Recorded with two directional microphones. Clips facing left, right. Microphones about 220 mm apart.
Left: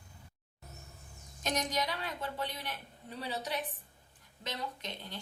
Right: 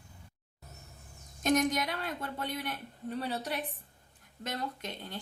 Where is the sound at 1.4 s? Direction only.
50° right (ahead or behind).